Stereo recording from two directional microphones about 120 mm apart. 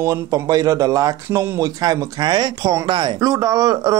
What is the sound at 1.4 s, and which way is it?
Speech, 20° right (ahead or behind).